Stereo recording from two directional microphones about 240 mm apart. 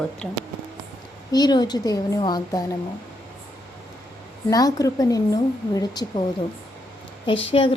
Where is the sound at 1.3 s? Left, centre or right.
Centre.